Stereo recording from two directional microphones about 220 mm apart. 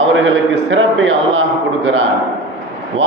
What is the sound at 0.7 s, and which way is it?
A man's voice, 60° right (ahead or behind).